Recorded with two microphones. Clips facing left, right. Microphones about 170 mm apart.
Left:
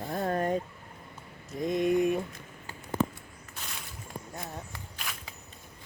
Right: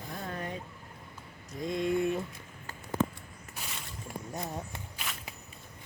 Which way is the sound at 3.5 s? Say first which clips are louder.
Even; 5° right (ahead or behind).